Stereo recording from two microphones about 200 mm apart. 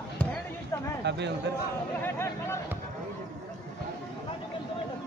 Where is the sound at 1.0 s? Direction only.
60° right (ahead or behind).